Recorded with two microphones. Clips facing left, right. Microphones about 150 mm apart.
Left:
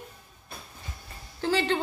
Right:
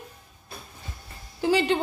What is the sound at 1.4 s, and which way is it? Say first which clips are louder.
Speech: right 4 dB; 15° right (ahead or behind).